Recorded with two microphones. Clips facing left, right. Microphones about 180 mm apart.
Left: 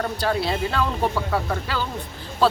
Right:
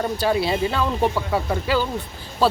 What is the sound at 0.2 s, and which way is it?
Speech, 5° right (ahead or behind).